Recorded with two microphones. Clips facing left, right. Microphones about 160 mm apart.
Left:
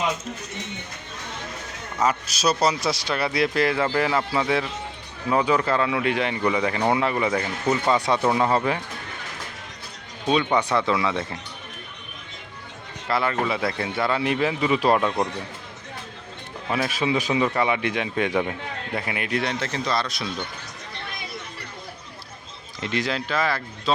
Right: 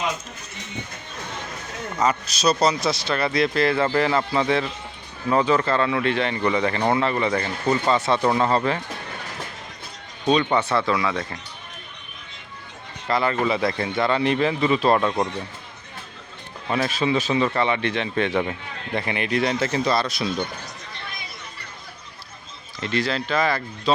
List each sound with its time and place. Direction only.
2.0 s speech: 5° left (ahead or behind)
10.2 s speech: 10° left (ahead or behind)
13.1 s speech: 5° left (ahead or behind)
16.6 s speech: 5° left (ahead or behind)
22.8 s speech: 15° left (ahead or behind)
23.3 s speech: 5° left (ahead or behind)